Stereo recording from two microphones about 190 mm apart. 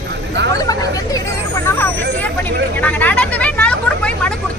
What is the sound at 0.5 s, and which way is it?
Hubbub, 20° left (ahead or behind).